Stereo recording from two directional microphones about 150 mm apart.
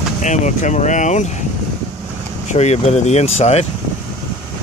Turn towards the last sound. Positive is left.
turn(degrees=45)  # may be behind; listen again after turning